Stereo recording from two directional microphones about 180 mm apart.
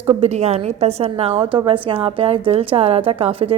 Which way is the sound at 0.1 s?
35° right (ahead or behind).